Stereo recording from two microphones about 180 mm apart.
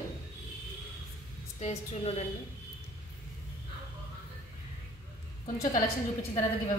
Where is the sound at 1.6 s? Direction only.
35° left (ahead or behind).